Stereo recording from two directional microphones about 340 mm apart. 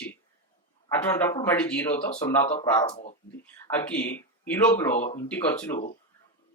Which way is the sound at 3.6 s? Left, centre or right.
Centre.